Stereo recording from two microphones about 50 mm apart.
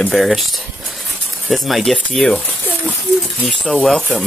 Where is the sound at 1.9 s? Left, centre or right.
Left.